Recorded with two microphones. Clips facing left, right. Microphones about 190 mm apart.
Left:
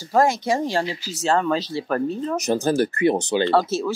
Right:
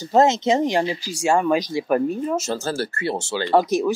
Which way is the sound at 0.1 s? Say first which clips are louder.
Right 3 dB; 25° right (ahead or behind).